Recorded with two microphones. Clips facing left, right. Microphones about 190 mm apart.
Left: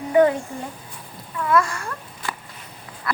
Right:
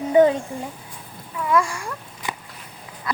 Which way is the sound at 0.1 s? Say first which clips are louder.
Right 1 dB; 20° right (ahead or behind).